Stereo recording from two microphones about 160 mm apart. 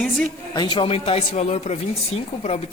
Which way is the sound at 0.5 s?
30° left (ahead or behind).